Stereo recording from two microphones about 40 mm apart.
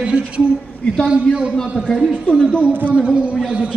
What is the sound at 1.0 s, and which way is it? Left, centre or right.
Speech, right.